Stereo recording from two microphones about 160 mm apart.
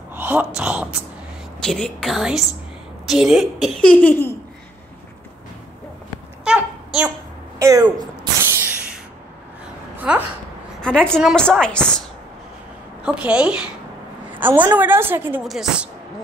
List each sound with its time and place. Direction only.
0.1 s speech: 10° right (ahead or behind); by 4.4 s 15° left (ahead or behind)
6.4 s babbling: 5° right (ahead or behind)
7.5 s speech: 20° right (ahead or behind)
8.5 s a sound: 5° right (ahead or behind)
10.1 s a woman's voice: 10° right (ahead or behind)
10.8 s speech: 5° left (ahead or behind)
13.0 s a woman's voice: 5° right (ahead or behind)
14.3 s a sound: 10° right (ahead or behind)
14.7 s a woman's voice: 15° right (ahead or behind)
15.4 s speech: centre (ahead or behind)